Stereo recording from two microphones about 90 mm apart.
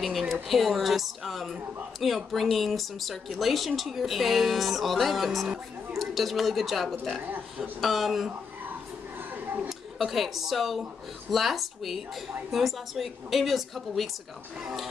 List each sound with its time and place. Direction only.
0.0 s speech: centre (ahead or behind)
7.2 s speech: 15° right (ahead or behind)
7.8 s speech: centre (ahead or behind)
9.3 s a sound: 20° right (ahead or behind)
9.7 s speech: centre (ahead or behind)